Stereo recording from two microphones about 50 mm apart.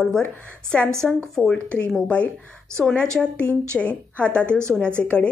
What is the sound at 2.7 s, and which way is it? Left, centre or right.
A woman's voice, centre.